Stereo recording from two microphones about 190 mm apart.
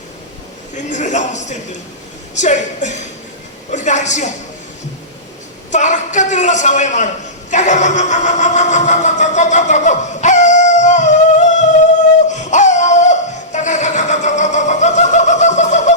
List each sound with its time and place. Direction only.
0.9 s a man's voice: 40° left (ahead or behind)
5.7 s a man's voice: 40° left (ahead or behind)
12.3 s a sound: 40° left (ahead or behind)